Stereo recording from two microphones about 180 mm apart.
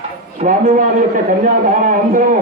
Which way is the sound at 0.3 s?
40° right (ahead or behind).